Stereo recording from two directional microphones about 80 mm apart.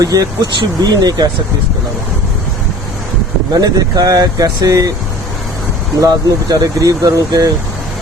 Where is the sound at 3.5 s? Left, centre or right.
Right.